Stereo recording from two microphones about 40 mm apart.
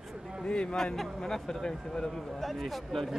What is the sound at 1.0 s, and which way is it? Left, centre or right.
Speech, centre.